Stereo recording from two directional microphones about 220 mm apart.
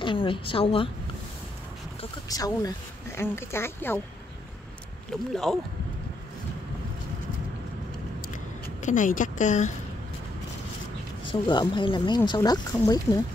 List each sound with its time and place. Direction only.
0.0 s a woman's voice: 25° left (ahead or behind)
2.2 s speech: 15° left (ahead or behind)
5.1 s speech: centre (ahead or behind)
8.8 s a woman's voice: 35° left (ahead or behind)
11.4 s a woman's voice: 20° left (ahead or behind)